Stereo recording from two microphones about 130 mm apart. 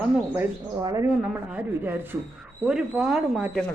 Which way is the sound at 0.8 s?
30° right (ahead or behind).